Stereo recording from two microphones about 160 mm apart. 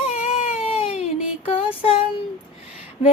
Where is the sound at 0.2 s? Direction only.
55° left (ahead or behind).